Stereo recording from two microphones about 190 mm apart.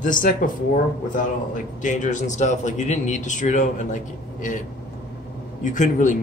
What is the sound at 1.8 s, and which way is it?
A man's voice, 40° left (ahead or behind).